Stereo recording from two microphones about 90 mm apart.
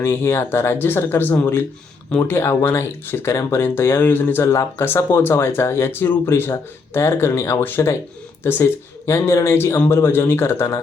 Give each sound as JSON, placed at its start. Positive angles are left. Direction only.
{"t": 0.0, "sound": "speech", "side_deg": 25}